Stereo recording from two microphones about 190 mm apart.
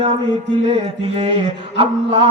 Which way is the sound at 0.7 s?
30° right (ahead or behind).